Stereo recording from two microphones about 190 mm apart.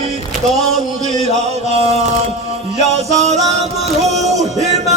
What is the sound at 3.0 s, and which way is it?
Music, 35° right (ahead or behind).